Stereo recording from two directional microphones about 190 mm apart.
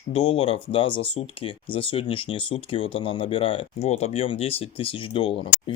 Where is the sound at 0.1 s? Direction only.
25° left (ahead or behind).